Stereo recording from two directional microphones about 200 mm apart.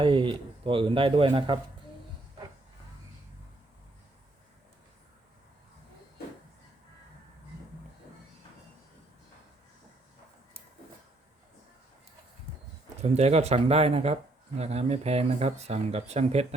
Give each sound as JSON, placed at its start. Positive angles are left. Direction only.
{"t": 0.0, "sound": "speech", "side_deg": -25}
{"t": 13.0, "sound": "speech", "side_deg": -30}